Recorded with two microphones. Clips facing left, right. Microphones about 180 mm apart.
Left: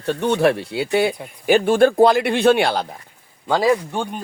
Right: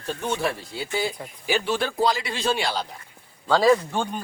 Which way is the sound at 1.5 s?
50° left (ahead or behind).